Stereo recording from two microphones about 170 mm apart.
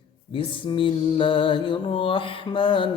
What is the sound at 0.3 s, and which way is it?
Mantra, 30° left (ahead or behind).